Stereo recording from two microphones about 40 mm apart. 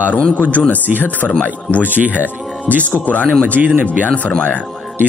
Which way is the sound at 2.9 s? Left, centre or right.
Left.